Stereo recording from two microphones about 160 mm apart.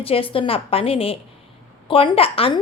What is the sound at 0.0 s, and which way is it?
A woman's voice, 35° left (ahead or behind).